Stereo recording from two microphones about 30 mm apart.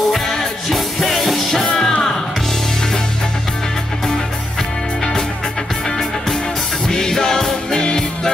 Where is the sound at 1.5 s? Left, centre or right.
Centre.